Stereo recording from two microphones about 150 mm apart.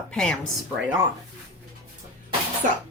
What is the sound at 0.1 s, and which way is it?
Speech, 5° left (ahead or behind).